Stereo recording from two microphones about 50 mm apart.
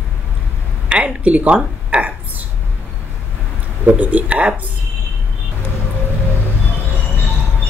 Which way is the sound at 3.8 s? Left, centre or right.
Right.